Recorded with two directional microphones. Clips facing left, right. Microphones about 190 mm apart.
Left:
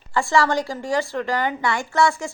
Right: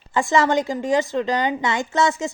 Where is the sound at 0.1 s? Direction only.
20° right (ahead or behind).